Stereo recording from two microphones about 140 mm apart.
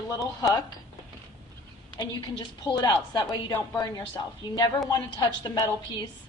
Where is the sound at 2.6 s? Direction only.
25° left (ahead or behind).